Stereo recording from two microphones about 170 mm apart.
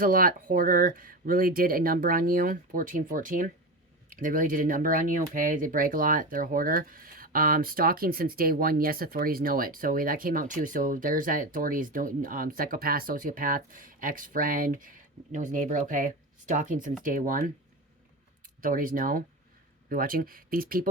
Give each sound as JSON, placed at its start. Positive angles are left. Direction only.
{"t": 0.0, "sound": "speech", "side_deg": -55}
{"t": 18.6, "sound": "speech", "side_deg": -55}